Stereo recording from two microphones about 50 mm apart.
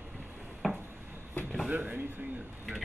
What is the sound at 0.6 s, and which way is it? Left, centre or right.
Wood, centre.